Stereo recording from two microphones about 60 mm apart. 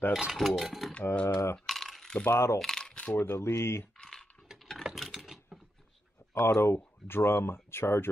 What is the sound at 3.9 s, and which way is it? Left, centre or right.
Typing, centre.